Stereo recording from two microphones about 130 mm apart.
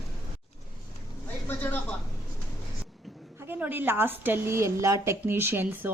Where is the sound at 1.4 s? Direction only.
15° left (ahead or behind).